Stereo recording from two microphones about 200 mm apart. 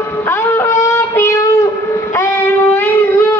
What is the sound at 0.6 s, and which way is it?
Shofar, 15° left (ahead or behind).